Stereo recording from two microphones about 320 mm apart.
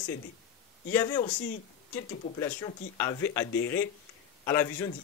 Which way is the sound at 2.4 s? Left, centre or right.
Centre.